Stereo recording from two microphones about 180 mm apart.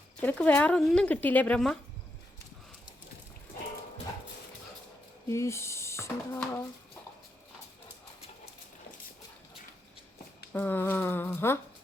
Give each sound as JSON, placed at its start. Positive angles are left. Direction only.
{"t": 0.2, "sound": "speech", "side_deg": 10}
{"t": 5.3, "sound": "speech", "side_deg": 15}
{"t": 10.5, "sound": "speech", "side_deg": 10}